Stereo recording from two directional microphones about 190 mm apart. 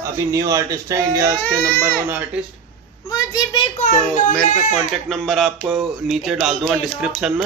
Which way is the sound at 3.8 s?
40° left (ahead or behind).